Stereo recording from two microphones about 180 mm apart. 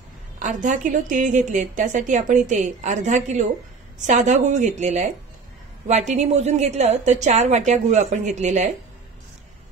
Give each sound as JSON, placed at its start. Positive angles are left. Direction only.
{"t": 0.4, "sound": "a woman's voice", "side_deg": -45}